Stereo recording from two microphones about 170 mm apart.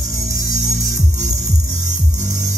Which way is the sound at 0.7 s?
45° right (ahead or behind).